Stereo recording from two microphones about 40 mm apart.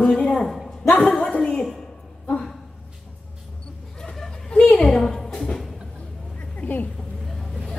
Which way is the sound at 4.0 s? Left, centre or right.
Centre.